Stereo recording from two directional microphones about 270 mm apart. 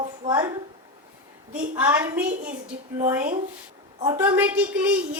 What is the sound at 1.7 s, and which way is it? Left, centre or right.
A woman's voice, centre.